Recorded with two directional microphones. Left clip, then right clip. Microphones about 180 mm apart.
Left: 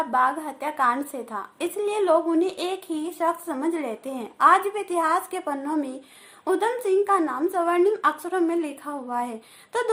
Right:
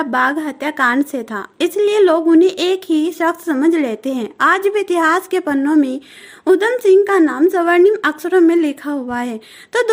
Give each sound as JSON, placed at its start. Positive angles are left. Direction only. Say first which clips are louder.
{"t": 0.0, "sound": "a woman's voice", "louder": "right 6 dB", "side_deg": -50}